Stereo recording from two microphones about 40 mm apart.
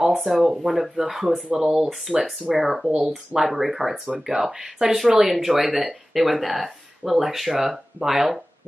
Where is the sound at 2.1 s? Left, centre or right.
Centre.